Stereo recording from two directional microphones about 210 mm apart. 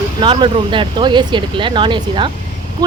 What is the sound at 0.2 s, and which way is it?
Speech, 20° right (ahead or behind).